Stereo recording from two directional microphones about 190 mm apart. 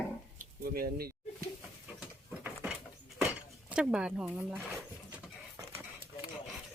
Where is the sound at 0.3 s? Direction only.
50° right (ahead or behind).